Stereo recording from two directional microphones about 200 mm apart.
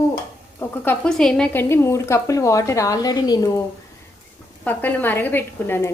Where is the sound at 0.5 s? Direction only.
10° left (ahead or behind).